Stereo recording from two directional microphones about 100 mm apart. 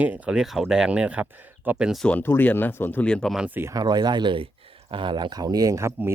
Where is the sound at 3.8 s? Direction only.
45° right (ahead or behind).